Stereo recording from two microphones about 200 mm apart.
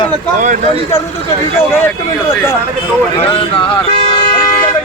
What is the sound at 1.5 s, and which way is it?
Speech, 10° left (ahead or behind).